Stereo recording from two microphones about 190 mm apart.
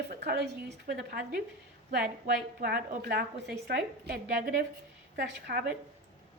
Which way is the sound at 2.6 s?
55° right (ahead or behind).